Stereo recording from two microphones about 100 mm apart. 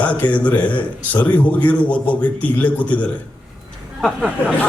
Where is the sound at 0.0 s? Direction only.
15° left (ahead or behind).